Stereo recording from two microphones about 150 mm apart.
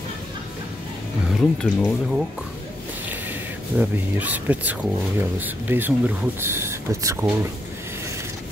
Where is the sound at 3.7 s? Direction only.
10° right (ahead or behind).